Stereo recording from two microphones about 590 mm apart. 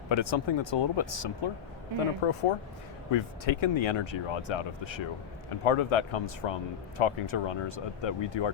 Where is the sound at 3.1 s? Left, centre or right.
Left.